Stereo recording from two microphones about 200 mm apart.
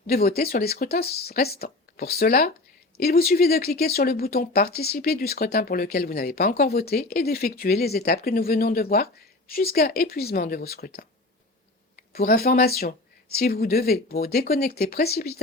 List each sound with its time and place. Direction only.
0.1 s speech: 50° left (ahead or behind)